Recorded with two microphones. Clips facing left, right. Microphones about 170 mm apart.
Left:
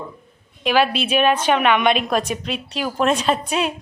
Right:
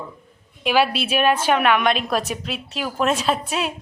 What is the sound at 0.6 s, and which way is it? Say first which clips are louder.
A woman's voice: left 1 dB; 10° right (ahead or behind).